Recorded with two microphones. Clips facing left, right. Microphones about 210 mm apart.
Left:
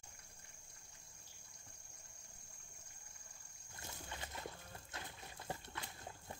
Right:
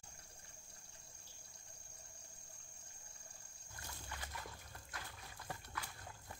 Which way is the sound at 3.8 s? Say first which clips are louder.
Left 2 dB; 25° left (ahead or behind).